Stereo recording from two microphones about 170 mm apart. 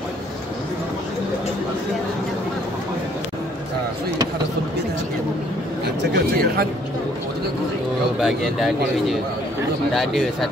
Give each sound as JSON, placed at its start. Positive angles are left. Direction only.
{"t": 6.1, "sound": "a man's voice", "side_deg": -70}
{"t": 8.2, "sound": "speech", "side_deg": 0}